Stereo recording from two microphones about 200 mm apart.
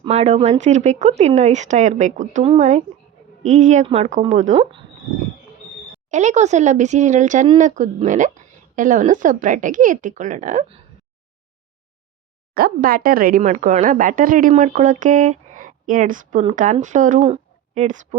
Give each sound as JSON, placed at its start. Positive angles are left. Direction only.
{"t": 0.0, "sound": "speech", "side_deg": -35}
{"t": 6.1, "sound": "speech", "side_deg": -35}
{"t": 12.5, "sound": "speech", "side_deg": -50}